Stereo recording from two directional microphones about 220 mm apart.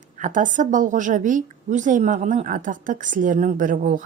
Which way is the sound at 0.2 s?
35° right (ahead or behind).